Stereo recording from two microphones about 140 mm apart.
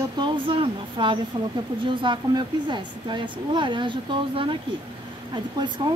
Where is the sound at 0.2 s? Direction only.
35° right (ahead or behind).